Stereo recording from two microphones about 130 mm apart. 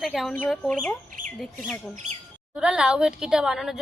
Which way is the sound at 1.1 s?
90° right.